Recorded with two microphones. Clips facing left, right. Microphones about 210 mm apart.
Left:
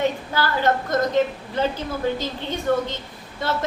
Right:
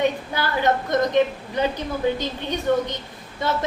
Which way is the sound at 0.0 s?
20° right (ahead or behind).